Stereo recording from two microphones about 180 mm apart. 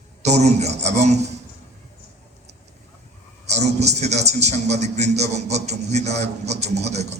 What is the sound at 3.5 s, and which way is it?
A man's voice, 40° right (ahead or behind).